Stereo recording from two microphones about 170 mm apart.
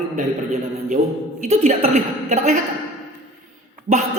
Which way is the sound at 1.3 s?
45° right (ahead or behind).